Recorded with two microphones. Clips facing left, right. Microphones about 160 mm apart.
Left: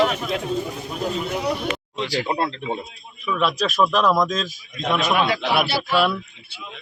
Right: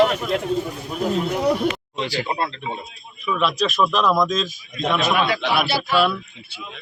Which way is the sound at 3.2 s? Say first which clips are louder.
Right 1 dB; 5° left (ahead or behind).